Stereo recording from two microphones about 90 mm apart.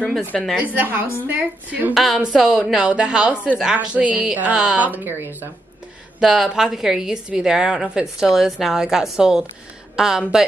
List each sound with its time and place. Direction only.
0.3 s a woman's voice: 5° left (ahead or behind)
0.7 s a woman's voice: 20° right (ahead or behind)
2.0 s a woman's voice: centre (ahead or behind); by 5.5 s 25° right (ahead or behind)
6.1 s a woman's voice: 5° right (ahead or behind)